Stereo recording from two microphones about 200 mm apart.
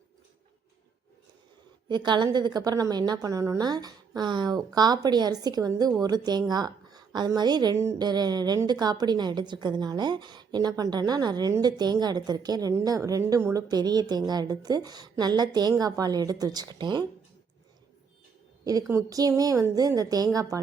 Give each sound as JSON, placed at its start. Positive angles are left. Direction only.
{"t": 1.9, "sound": "a woman's voice", "side_deg": -20}
{"t": 18.6, "sound": "a woman's voice", "side_deg": -15}